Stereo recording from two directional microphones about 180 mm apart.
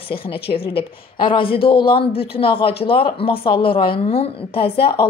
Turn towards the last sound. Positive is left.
turn(degrees=30)  # may be behind; listen again after turning